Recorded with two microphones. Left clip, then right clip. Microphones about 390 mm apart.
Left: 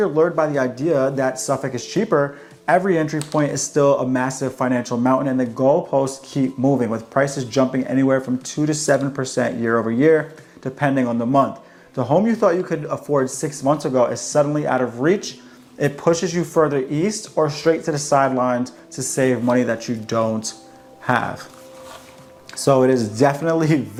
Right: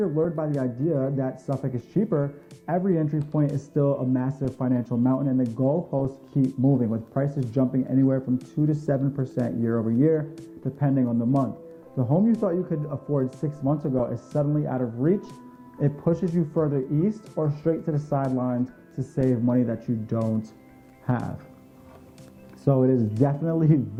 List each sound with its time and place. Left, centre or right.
0.0 s speech: centre
22.5 s speech: centre